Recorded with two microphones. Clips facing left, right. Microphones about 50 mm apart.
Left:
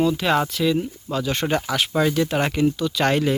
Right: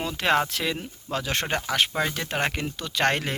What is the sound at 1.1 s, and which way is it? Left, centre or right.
Speech, right.